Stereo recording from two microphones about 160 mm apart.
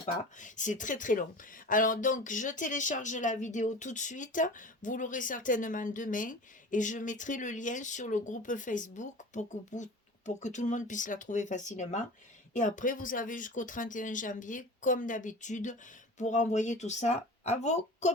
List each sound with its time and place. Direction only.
0.3 s speech: 50° left (ahead or behind)